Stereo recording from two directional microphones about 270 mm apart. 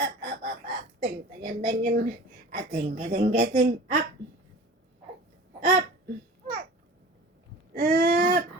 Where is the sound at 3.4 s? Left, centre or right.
Right.